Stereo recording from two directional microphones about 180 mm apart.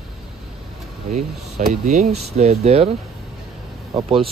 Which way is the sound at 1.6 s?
45° right (ahead or behind).